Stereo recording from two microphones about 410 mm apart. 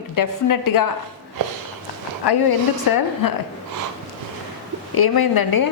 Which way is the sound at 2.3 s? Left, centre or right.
Left.